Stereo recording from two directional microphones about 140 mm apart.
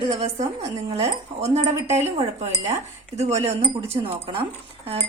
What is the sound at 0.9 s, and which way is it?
Speech, 50° right (ahead or behind).